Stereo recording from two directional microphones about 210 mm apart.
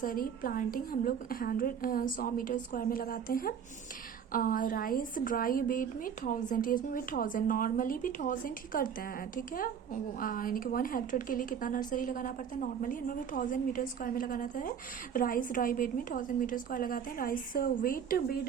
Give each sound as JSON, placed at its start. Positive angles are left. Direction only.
{"t": 0.0, "sound": "a woman's voice", "side_deg": 45}